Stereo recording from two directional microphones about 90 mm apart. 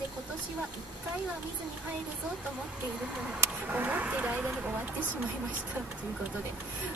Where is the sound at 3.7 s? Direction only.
15° right (ahead or behind).